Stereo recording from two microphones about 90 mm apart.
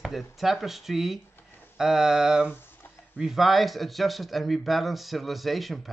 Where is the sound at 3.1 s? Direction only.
5° right (ahead or behind).